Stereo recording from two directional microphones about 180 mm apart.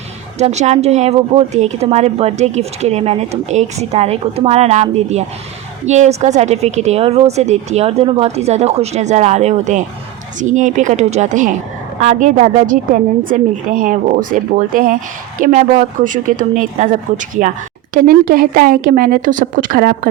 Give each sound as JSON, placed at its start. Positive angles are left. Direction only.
{"t": 0.3, "sound": "a woman's voice", "side_deg": -40}